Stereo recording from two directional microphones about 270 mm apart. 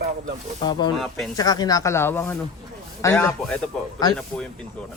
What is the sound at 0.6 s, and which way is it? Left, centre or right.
Speech, centre.